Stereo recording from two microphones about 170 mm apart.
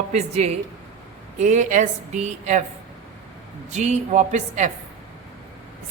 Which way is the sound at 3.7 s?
45° right (ahead or behind).